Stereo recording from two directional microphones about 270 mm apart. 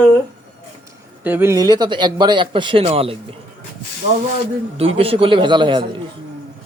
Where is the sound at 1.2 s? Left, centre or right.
Centre.